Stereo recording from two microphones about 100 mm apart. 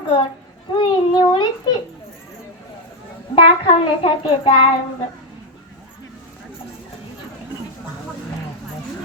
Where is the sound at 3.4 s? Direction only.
65° left (ahead or behind).